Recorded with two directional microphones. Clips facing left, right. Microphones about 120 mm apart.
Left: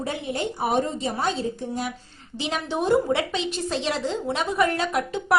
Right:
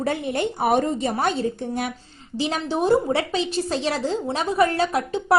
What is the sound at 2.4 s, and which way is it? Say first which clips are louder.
A woman's voice: right 3 dB; 35° right (ahead or behind).